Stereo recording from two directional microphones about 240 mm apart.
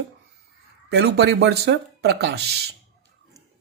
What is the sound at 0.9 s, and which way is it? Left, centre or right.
Speech, right.